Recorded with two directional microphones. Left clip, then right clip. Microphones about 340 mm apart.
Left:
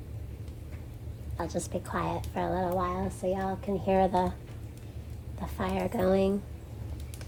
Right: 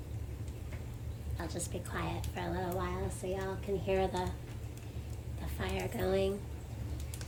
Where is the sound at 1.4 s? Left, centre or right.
Left.